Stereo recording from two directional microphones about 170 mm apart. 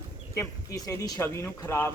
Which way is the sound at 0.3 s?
20° left (ahead or behind).